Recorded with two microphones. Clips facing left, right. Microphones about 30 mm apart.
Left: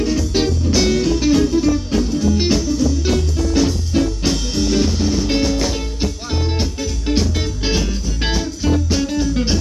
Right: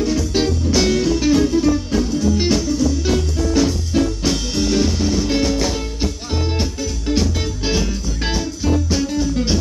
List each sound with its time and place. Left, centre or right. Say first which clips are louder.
0.0 s music: even; centre